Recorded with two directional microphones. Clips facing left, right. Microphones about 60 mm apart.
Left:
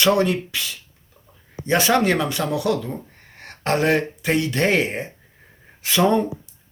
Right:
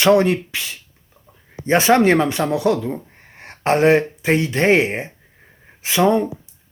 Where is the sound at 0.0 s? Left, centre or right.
Right.